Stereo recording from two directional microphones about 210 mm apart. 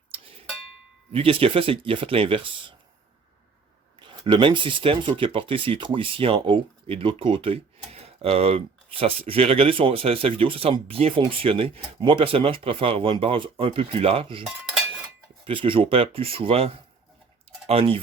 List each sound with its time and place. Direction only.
0.1 s a sound: 25° right (ahead or behind)
1.1 s speech: 25° right (ahead or behind)
4.0 s speech: 25° right (ahead or behind)
15.4 s speech: 25° right (ahead or behind)